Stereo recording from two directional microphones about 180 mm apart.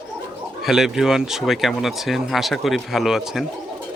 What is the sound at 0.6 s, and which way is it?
Speech, centre (ahead or behind).